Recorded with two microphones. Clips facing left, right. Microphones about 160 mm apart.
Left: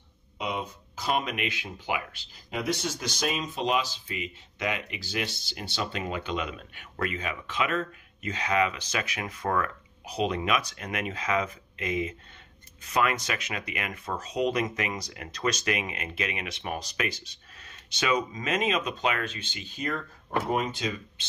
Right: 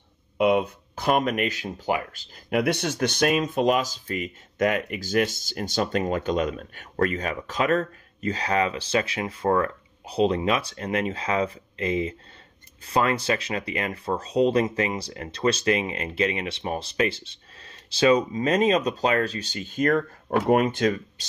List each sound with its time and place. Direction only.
0.4 s speech: 60° right (ahead or behind); by 2.4 s 45° right (ahead or behind)
2.5 s speech: 65° right (ahead or behind)
21.2 s speech: 40° right (ahead or behind)